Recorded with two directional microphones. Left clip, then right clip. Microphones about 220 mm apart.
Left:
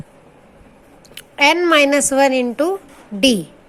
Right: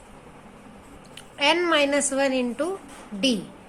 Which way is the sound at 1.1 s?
30° left (ahead or behind).